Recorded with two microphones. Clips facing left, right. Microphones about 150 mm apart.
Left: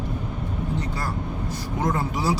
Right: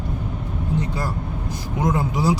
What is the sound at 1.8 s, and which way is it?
Speech, 15° right (ahead or behind).